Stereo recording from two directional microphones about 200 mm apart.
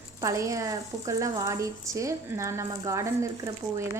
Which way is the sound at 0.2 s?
15° right (ahead or behind).